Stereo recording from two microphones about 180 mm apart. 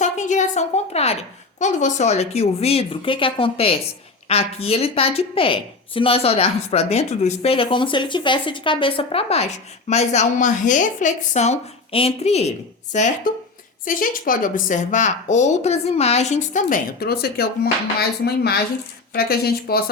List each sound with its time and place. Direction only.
0.0 s a woman's voice: 40° left (ahead or behind)
13.8 s speech: 50° left (ahead or behind)
19.1 s speech: 60° left (ahead or behind)